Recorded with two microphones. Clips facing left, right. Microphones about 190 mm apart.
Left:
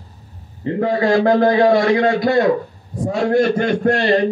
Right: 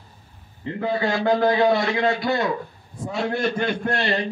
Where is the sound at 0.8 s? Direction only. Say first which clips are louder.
Left 7 dB; 40° left (ahead or behind).